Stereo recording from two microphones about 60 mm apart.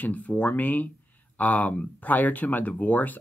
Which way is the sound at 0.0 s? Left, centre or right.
Left.